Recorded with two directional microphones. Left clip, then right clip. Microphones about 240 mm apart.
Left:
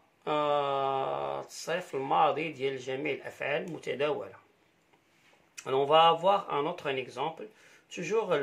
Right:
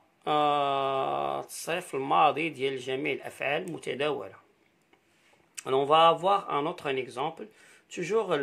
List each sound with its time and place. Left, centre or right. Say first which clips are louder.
0.2 s speech: right 3 dB; right
5.6 s speech: right 1 dB; right